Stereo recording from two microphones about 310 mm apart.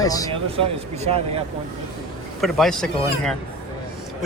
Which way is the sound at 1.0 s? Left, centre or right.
Centre.